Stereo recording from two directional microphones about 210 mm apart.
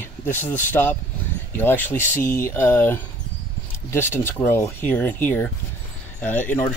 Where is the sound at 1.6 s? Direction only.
10° left (ahead or behind).